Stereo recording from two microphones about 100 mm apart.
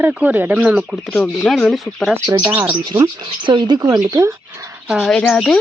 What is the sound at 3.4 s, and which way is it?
Speech, 50° right (ahead or behind).